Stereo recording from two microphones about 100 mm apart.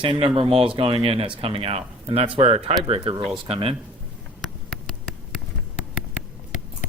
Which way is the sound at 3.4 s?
65° right (ahead or behind).